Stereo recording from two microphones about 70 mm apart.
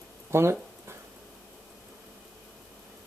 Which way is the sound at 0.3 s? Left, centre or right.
Right.